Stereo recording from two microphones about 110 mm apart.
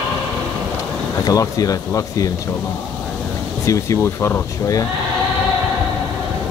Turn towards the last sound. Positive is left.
turn(degrees=25)  # may be behind; listen again after turning